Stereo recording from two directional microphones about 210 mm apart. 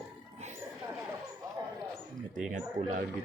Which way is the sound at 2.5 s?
40° right (ahead or behind).